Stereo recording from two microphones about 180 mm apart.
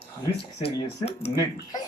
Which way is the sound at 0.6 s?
35° left (ahead or behind).